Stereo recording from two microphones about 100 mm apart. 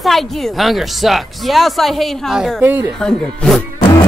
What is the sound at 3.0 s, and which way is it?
Speech, centre (ahead or behind).